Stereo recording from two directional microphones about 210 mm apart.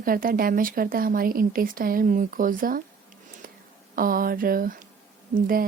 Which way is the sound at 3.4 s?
40° right (ahead or behind).